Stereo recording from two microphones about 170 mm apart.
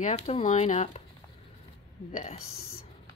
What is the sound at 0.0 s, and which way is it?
A woman's voice, 40° left (ahead or behind).